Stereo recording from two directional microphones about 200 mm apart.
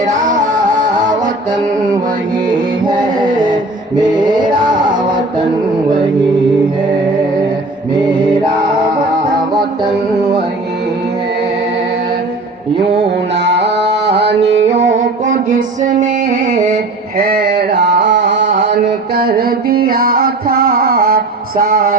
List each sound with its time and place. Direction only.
0.0 s music: 40° right (ahead or behind)
13.3 s music: 60° right (ahead or behind)
14.8 s music: 35° right (ahead or behind)
16.6 s mantra: 45° right (ahead or behind)
18.3 s mantra: 40° right (ahead or behind)
18.9 s mantra: 50° right (ahead or behind)